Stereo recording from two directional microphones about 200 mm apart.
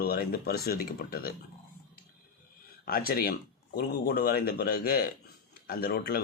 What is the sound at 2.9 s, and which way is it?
Speech, 50° left (ahead or behind).